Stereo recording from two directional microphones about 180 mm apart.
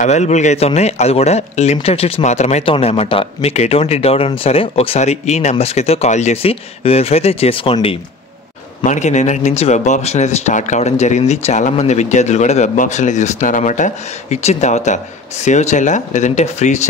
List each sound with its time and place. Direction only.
0.0 s speech: 40° left (ahead or behind)
8.8 s speech: 40° left (ahead or behind)